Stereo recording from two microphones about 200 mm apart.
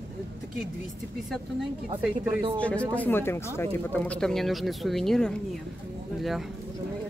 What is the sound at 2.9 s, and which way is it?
Speech, 10° left (ahead or behind).